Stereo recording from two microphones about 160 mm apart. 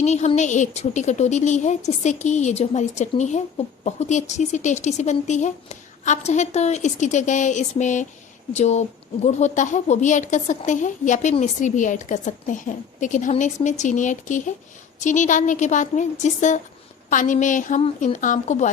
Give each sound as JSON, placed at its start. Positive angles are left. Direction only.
{"t": 0.0, "sound": "speech", "side_deg": 45}